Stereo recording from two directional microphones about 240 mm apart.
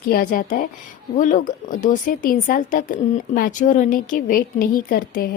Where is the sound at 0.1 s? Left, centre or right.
Left.